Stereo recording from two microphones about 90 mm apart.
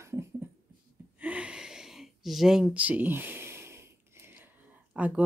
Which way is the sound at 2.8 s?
20° right (ahead or behind).